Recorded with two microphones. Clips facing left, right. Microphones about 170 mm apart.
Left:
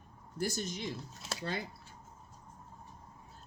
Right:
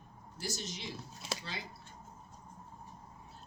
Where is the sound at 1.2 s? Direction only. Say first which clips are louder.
Right 2 dB; centre (ahead or behind).